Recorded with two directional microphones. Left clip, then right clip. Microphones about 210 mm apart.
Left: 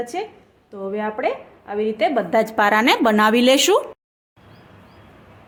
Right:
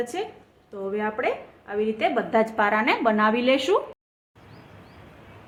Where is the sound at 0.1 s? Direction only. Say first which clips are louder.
Left 3 dB; 30° left (ahead or behind); by 3.8 s 55° left (ahead or behind).